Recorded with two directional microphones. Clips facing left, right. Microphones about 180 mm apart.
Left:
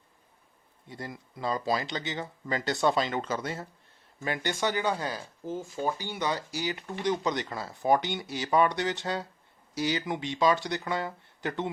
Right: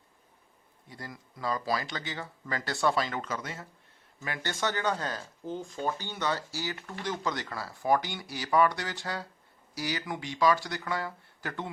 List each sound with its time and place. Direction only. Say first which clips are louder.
0.9 s speech: left 4 dB; 25° left (ahead or behind)
4.4 s speech: left 1 dB; 10° left (ahead or behind)